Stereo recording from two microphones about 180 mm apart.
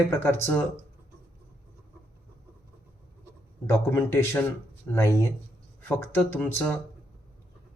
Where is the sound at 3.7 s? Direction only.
10° left (ahead or behind).